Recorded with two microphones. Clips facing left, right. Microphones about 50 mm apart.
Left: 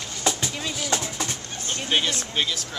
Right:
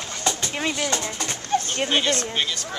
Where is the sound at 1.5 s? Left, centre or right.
Right.